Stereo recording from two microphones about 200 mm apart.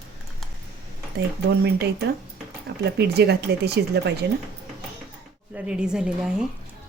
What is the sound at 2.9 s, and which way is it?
Speech, 55° right (ahead or behind).